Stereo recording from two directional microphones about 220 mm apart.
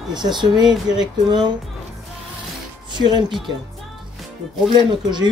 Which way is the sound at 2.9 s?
20° right (ahead or behind).